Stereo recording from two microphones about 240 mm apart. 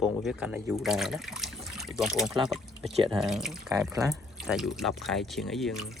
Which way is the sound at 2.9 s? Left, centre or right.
Right.